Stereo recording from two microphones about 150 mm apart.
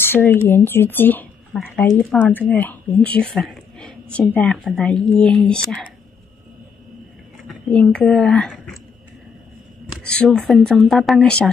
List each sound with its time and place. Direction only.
0.0 s speech: 15° left (ahead or behind)
7.4 s speech: 5° left (ahead or behind)
10.0 s speech: 5° left (ahead or behind)